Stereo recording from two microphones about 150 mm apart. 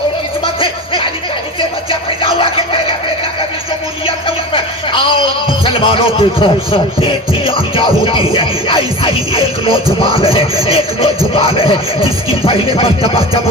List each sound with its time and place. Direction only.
0.4 s music: 35° left (ahead or behind)
1.9 s a sound: 35° left (ahead or behind)
4.0 s speech: 35° left (ahead or behind)
8.3 s music: 35° left (ahead or behind)